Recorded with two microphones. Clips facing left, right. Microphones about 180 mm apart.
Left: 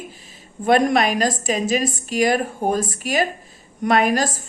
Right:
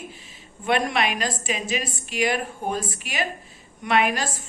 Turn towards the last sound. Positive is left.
turn(degrees=40)  # may be behind; listen again after turning